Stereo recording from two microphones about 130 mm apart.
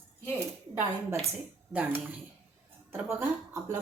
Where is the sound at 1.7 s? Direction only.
15° right (ahead or behind).